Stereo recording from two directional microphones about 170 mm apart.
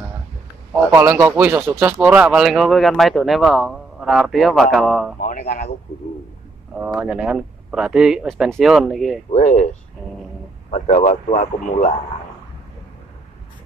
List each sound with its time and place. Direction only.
0.9 s speech: 15° right (ahead or behind)
5.2 s a man's voice: 45° left (ahead or behind)
6.7 s speech: 5° right (ahead or behind)
9.3 s a man's voice: 45° left (ahead or behind)
10.7 s a man's voice: 45° left (ahead or behind)